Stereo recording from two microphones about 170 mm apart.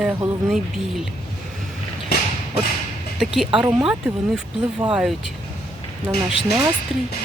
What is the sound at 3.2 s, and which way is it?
Speech, centre (ahead or behind).